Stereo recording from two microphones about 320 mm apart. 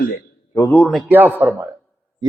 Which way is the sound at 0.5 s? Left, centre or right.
Centre.